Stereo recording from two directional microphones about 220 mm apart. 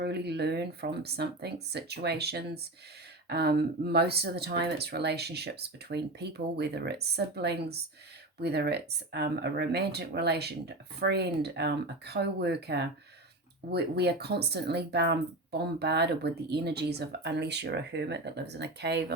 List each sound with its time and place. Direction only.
0.0 s speech: 50° right (ahead or behind)